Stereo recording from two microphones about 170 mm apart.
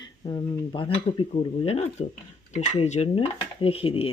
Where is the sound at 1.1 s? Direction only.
35° left (ahead or behind).